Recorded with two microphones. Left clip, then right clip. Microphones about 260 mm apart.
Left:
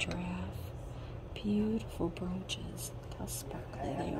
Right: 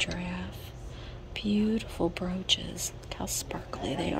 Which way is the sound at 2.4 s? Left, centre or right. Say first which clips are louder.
Right 13 dB; right.